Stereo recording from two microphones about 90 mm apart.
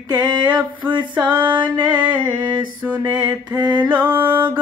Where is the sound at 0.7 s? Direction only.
60° right (ahead or behind).